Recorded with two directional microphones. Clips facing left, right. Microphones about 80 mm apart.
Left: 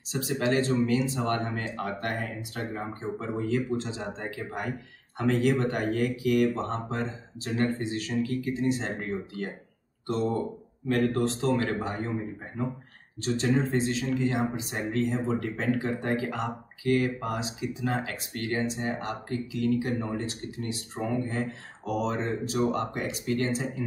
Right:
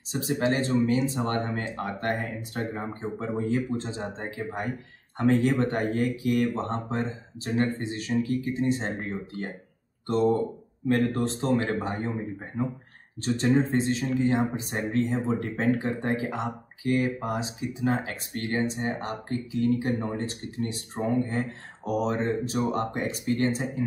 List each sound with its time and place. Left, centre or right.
0.1 s speech: right
13.2 s speech: right